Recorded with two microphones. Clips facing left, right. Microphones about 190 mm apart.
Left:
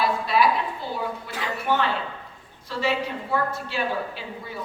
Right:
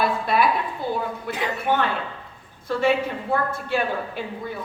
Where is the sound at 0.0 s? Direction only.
55° right (ahead or behind).